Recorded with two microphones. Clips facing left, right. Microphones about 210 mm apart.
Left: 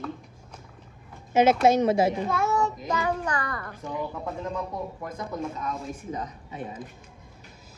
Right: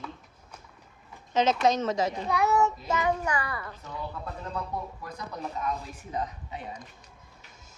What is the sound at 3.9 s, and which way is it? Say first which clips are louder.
Speech: left 5 dB; 15° left (ahead or behind).